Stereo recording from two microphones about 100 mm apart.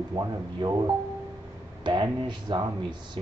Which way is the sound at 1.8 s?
50° right (ahead or behind).